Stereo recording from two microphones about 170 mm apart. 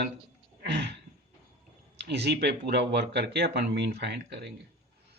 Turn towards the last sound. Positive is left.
turn(degrees=-80)